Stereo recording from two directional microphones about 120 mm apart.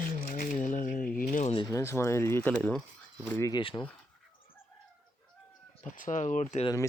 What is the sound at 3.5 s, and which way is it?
Speech, 40° left (ahead or behind).